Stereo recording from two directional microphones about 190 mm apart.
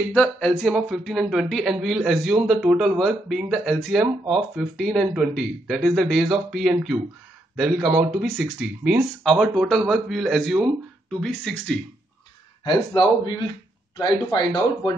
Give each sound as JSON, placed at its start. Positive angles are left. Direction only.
{"t": 0.1, "sound": "a man's voice", "side_deg": 5}
{"t": 12.6, "sound": "speech", "side_deg": 25}